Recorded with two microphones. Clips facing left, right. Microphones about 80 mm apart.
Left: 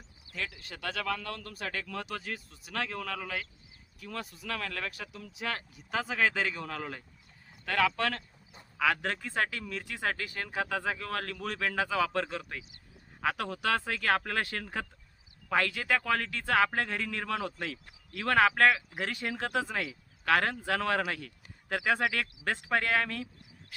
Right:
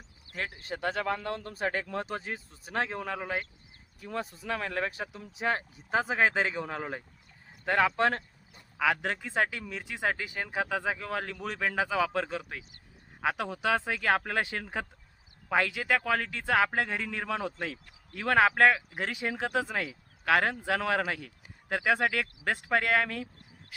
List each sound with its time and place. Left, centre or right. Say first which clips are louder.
0.3 s speech: right 4 dB; right
8.8 s speech: right 1 dB; centre
21.1 s a sound: right 2 dB; centre
21.8 s speech: right 2 dB; centre